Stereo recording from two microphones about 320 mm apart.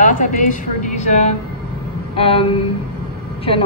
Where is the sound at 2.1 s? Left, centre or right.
Centre.